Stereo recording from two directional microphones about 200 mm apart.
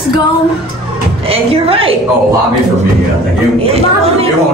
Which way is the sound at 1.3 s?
30° right (ahead or behind).